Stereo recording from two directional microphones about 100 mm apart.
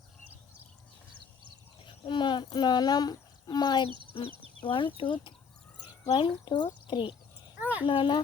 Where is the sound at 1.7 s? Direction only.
55° left (ahead or behind).